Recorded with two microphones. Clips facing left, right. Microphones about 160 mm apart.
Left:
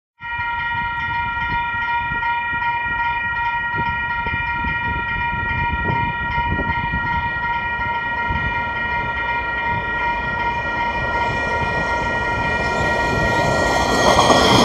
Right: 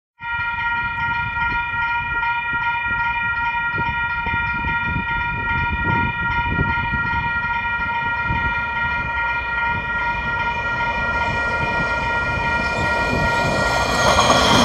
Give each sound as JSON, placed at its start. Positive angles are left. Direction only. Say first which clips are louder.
{"t": 13.2, "sound": "train", "louder": "left 2 dB", "side_deg": 45}
{"t": 13.7, "sound": "train", "louder": "left 3 dB", "side_deg": 15}